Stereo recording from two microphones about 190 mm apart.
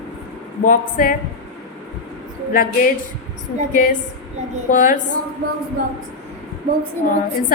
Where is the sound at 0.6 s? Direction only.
45° left (ahead or behind).